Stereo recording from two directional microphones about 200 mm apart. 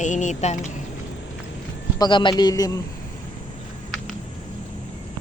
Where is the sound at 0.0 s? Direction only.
40° left (ahead or behind).